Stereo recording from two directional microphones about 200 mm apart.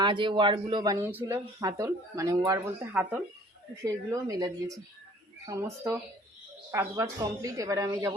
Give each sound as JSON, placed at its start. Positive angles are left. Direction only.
{"t": 0.0, "sound": "speech", "side_deg": -25}